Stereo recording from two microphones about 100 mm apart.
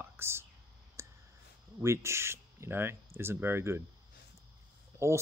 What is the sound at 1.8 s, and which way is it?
Speech, 25° right (ahead or behind).